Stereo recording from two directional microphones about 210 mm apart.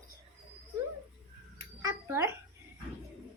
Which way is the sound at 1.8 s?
15° right (ahead or behind).